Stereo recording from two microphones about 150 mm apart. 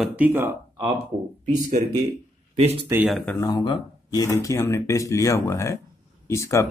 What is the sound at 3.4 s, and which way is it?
Speech, 30° left (ahead or behind).